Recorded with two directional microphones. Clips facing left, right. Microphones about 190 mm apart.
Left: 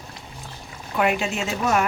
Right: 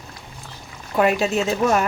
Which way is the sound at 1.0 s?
35° right (ahead or behind).